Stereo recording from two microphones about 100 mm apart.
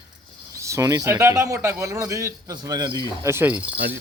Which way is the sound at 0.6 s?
30° right (ahead or behind).